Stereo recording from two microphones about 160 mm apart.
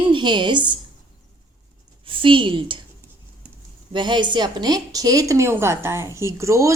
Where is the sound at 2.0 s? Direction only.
30° right (ahead or behind).